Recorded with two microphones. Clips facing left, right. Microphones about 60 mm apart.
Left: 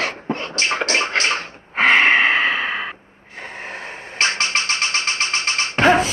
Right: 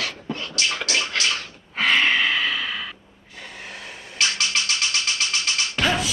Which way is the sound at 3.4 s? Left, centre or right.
Left.